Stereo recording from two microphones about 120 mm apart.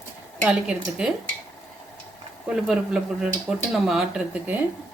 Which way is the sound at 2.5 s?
5° right (ahead or behind).